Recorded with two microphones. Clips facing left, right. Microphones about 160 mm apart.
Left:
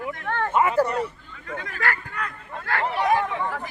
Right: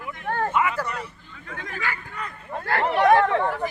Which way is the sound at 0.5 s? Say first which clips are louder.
Left 4 dB; 35° left (ahead or behind).